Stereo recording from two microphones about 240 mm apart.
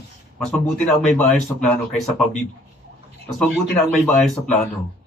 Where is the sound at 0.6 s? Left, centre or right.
Centre.